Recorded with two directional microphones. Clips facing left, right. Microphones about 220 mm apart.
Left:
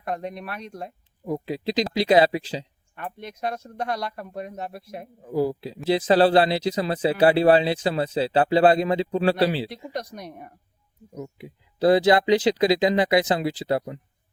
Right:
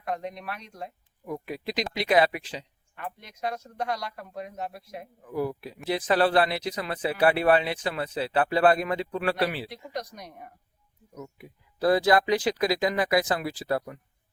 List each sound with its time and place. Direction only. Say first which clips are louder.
0.0 s speech: left 2 dB; 60° left (ahead or behind)
1.2 s speech: left 6 dB; 25° left (ahead or behind)
2.9 s speech: left 4 dB; 55° left (ahead or behind)
5.2 s speech: left 6 dB; 30° left (ahead or behind)
11.1 s speech: left 6 dB; 25° left (ahead or behind)